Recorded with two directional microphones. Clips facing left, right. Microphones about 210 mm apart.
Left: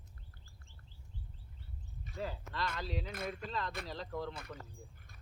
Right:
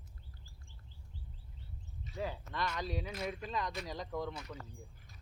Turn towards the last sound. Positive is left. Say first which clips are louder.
# right 1 dB
turn(degrees=-15)  # may be behind; listen again after turning